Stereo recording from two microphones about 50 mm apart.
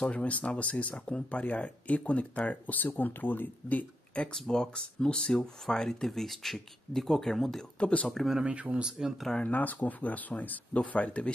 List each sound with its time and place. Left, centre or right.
0.0 s speech: left; by 7.6 s centre
7.8 s speech: left
8.4 s speech: right
9.4 s speech: left